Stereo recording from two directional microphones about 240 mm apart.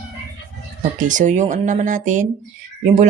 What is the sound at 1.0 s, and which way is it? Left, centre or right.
Speech, right.